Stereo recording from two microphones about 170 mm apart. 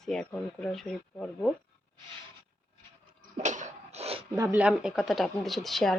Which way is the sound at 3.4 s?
45° right (ahead or behind).